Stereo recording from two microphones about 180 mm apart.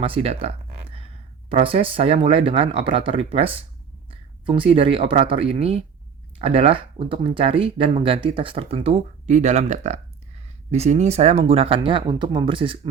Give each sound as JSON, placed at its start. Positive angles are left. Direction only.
{"t": 0.0, "sound": "speech", "side_deg": -35}